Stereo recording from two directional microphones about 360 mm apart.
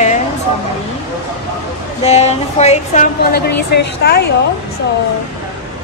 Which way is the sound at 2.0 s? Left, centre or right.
Centre.